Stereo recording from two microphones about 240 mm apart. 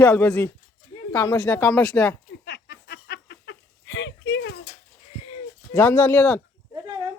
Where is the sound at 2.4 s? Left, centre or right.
Left.